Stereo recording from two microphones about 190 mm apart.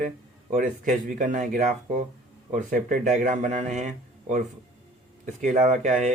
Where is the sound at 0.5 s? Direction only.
45° right (ahead or behind).